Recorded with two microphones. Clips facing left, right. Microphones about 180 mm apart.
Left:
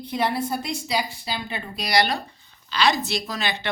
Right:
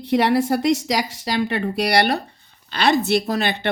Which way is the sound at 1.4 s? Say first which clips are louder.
Right 11 dB; 70° right (ahead or behind).